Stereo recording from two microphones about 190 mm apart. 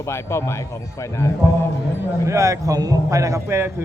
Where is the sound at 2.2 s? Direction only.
15° right (ahead or behind).